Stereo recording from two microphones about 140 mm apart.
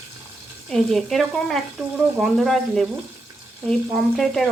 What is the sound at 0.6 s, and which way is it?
Speech, centre (ahead or behind).